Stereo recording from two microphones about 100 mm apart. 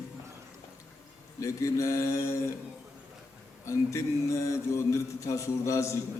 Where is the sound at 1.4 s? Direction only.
30° left (ahead or behind).